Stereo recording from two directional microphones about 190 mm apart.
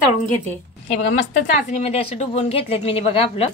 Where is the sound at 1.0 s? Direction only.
90° left.